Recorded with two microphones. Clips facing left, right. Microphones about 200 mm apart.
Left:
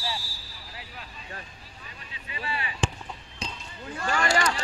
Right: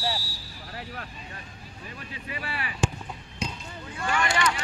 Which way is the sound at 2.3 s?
25° left (ahead or behind).